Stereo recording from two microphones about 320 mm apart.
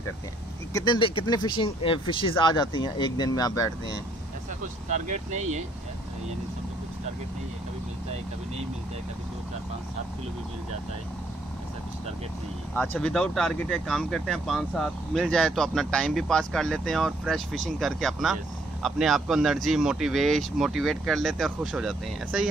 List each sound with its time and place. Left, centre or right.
0.7 s speech: centre
4.8 s speech: right
12.7 s speech: centre